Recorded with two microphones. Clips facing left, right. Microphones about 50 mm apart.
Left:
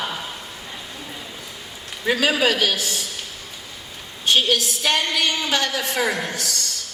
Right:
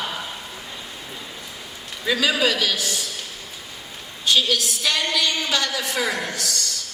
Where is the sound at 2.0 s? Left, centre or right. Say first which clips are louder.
Left 1 dB; left.